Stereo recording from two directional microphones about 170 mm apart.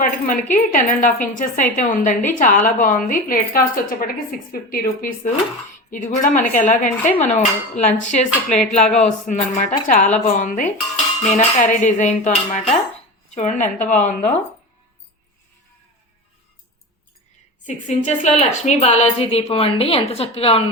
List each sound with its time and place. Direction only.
0.0 s a woman's voice: 50° left (ahead or behind)
17.7 s a woman's voice: 45° left (ahead or behind)